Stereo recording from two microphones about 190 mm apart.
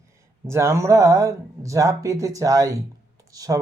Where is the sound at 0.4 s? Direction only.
15° right (ahead or behind).